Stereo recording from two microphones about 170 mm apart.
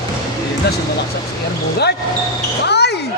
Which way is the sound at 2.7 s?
80° left.